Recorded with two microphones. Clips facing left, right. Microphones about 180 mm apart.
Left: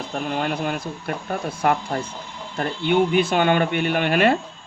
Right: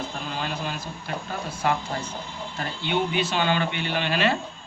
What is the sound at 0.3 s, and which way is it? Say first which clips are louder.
Speech: left 8 dB; 55° left (ahead or behind).